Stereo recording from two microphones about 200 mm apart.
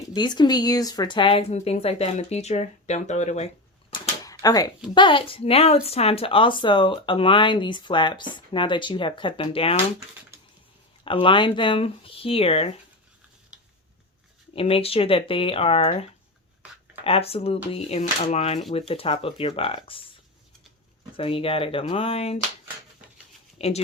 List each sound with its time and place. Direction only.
0.1 s a woman's voice: 20° left (ahead or behind)
4.2 s a sound: 15° left (ahead or behind)
4.9 s a woman's voice: 25° left (ahead or behind)
11.0 s a woman's voice: 25° left (ahead or behind)
14.5 s a woman's voice: 30° left (ahead or behind)
21.2 s a woman's voice: 30° left (ahead or behind)
23.6 s speech: 30° left (ahead or behind)